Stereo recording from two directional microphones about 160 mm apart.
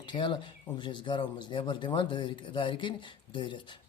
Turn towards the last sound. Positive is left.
turn(degrees=30)  # may be behind; listen again after turning